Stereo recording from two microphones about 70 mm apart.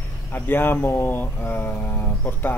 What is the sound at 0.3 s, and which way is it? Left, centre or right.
Speech, left.